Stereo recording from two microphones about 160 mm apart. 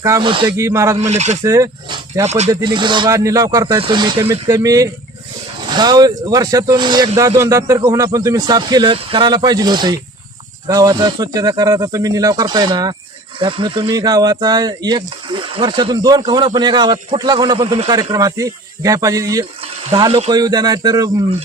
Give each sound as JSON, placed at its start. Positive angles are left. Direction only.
{"t": 0.2, "sound": "speech", "side_deg": -30}
{"t": 0.5, "sound": "speech", "side_deg": -20}
{"t": 0.9, "sound": "speech", "side_deg": -45}
{"t": 1.5, "sound": "speech", "side_deg": -20}
{"t": 2.2, "sound": "speech", "side_deg": -45}
{"t": 2.5, "sound": "a man's voice", "side_deg": -25}
{"t": 19.9, "sound": "a man's voice", "side_deg": -30}